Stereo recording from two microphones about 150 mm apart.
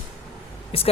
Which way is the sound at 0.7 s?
40° left (ahead or behind).